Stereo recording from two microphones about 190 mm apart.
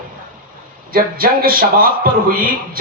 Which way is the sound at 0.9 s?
50° right (ahead or behind).